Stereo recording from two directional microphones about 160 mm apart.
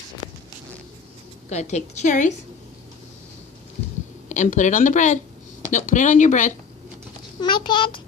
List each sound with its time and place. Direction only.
1.5 s a woman's voice: 45° left (ahead or behind)
4.3 s a woman's voice: 50° left (ahead or behind)
7.3 s a child's voice: 30° left (ahead or behind)